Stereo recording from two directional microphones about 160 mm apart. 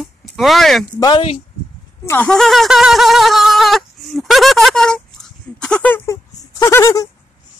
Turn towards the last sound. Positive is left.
turn(degrees=20)  # may be behind; listen again after turning